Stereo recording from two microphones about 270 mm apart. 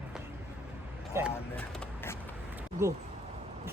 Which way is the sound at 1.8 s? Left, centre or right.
Centre.